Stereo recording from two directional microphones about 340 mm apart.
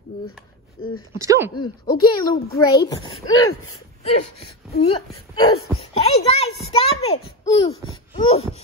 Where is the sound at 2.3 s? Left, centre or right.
Centre.